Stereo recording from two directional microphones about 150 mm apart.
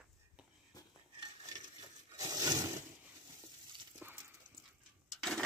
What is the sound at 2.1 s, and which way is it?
Roaring cats, 25° right (ahead or behind).